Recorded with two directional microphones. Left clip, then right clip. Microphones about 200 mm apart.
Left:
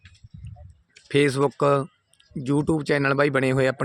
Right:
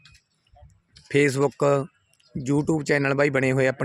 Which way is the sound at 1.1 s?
Centre (ahead or behind).